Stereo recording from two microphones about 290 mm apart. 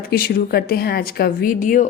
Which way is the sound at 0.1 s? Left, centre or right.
Left.